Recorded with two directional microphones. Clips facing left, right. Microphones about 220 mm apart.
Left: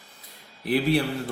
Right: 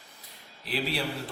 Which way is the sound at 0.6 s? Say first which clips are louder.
Left 9 dB; 55° left (ahead or behind).